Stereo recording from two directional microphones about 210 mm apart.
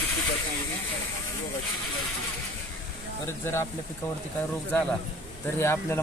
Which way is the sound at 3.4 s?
10° left (ahead or behind).